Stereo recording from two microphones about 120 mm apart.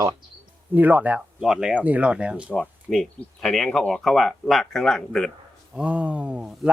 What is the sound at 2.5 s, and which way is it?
Speech, 5° left (ahead or behind).